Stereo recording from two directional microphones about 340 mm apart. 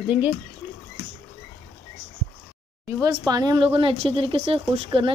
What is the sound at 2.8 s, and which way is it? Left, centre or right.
Speech, centre.